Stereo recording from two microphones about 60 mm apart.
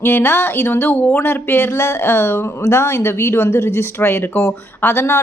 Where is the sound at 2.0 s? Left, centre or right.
Left.